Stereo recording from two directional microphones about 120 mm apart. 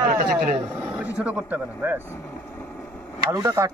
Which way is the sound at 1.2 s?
10° right (ahead or behind).